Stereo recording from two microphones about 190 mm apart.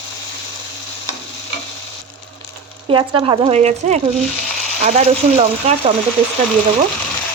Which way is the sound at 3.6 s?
35° right (ahead or behind).